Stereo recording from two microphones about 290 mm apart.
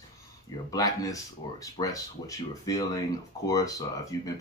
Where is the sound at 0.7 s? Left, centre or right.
Centre.